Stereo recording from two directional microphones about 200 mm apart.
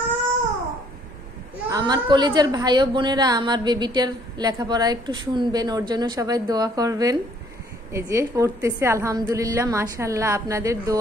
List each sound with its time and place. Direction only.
1.7 s a woman's voice: 20° right (ahead or behind)